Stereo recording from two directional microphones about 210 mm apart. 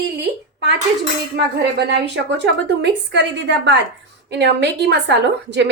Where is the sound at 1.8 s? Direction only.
55° right (ahead or behind).